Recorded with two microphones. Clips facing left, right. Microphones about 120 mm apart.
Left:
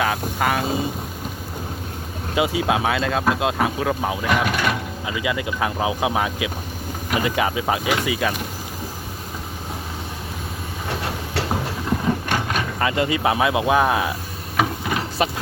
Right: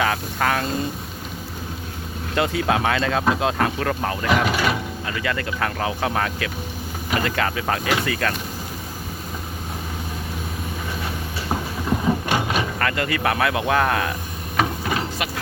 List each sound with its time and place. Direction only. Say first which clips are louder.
0.0 s speech: even; 5° left (ahead or behind)
2.3 s speech: left 1 dB; 10° left (ahead or behind)
5.0 s speech: left 2 dB; 10° left (ahead or behind)
11.9 s a sound: right 1 dB; 5° right (ahead or behind)
12.8 s speech: left 6 dB; 20° left (ahead or behind)